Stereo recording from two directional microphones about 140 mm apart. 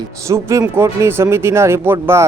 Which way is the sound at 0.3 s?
20° right (ahead or behind).